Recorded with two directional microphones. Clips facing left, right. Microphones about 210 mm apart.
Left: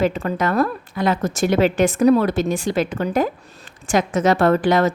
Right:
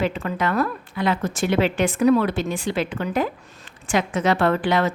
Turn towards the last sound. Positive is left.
turn(degrees=40)  # may be behind; listen again after turning